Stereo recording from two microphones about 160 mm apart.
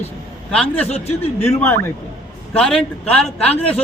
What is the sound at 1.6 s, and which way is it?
A man's voice, 15° left (ahead or behind).